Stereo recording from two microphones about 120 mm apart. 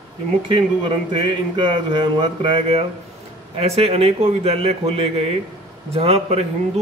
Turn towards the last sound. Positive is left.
turn(degrees=-60)  # may be behind; listen again after turning